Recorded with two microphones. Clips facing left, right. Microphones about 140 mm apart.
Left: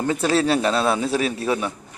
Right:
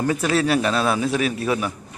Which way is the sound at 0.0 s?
25° left (ahead or behind).